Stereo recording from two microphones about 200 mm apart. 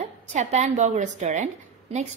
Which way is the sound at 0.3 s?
35° right (ahead or behind).